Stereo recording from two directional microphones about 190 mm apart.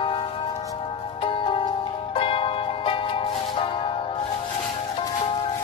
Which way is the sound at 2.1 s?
30° left (ahead or behind).